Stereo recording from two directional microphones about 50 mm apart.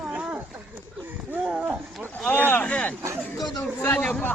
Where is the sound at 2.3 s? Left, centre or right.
Left.